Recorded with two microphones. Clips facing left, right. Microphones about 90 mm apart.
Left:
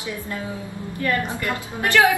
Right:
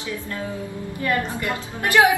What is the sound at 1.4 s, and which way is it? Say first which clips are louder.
Speech: left 1 dB; 20° right (ahead or behind).